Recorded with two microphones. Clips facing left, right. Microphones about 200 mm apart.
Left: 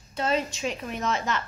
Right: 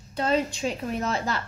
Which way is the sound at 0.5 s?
35° right (ahead or behind).